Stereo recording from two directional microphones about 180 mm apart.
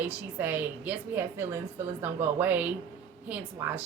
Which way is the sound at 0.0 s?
10° right (ahead or behind).